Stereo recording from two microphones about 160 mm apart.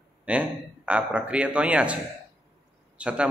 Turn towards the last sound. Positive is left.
turn(degrees=-5)  # may be behind; listen again after turning